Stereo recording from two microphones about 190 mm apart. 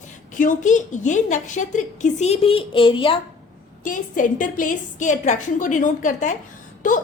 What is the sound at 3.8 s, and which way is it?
A woman's voice, 45° left (ahead or behind).